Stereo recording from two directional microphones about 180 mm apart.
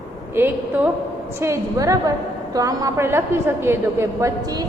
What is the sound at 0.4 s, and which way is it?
A woman's voice, 10° right (ahead or behind).